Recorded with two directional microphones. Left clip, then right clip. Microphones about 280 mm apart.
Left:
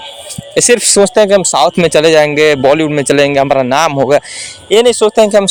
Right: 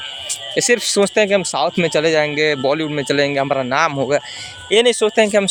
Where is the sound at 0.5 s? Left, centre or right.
Left.